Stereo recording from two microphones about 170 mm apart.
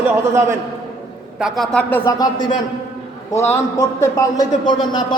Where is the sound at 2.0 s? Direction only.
25° left (ahead or behind).